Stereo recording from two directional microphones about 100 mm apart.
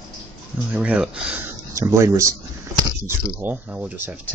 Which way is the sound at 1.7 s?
30° right (ahead or behind).